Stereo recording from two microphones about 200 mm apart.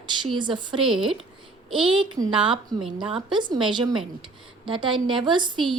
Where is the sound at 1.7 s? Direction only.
25° right (ahead or behind).